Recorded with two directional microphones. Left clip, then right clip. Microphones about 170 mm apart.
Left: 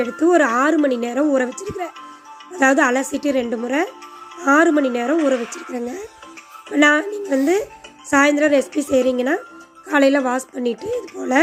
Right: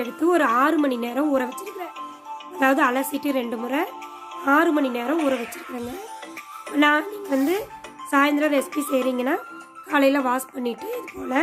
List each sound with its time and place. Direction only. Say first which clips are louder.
0.0 s speech: left 5 dB; 15° left (ahead or behind)
1.5 s speech: left 4 dB; centre (ahead or behind)
2.6 s a woman's voice: left 4 dB; 20° left (ahead or behind)
5.1 s speech: left 5 dB; centre (ahead or behind)
5.4 s a woman's voice: left 5 dB; 20° left (ahead or behind)